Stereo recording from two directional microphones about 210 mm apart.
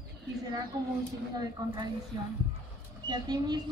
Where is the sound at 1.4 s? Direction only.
20° right (ahead or behind).